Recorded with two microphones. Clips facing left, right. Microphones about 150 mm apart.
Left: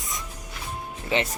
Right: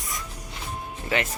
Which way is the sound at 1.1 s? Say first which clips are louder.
Left 1 dB; 20° left (ahead or behind).